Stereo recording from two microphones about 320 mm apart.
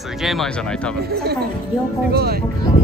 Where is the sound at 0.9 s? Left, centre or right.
Right.